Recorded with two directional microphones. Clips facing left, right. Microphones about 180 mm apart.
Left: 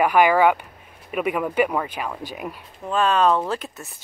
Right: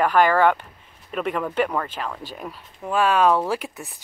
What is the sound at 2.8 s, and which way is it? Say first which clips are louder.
Speech: even; 10° right (ahead or behind).